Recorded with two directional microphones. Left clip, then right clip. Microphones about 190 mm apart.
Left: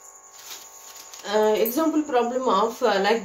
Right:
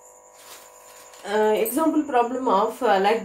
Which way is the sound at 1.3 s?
20° right (ahead or behind).